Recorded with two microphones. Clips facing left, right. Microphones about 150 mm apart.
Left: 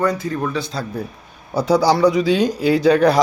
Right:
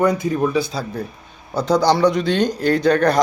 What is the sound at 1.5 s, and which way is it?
A man's voice, 10° left (ahead or behind).